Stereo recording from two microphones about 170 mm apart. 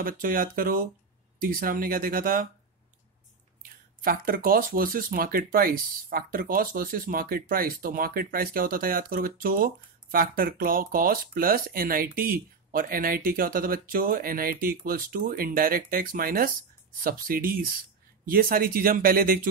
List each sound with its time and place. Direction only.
0.0 s speech: 55° right (ahead or behind)
3.6 s speech: 60° right (ahead or behind)